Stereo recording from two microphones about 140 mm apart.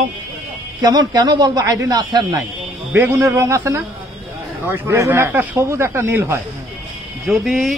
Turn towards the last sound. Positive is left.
turn(degrees=0)  # may be behind; listen again after turning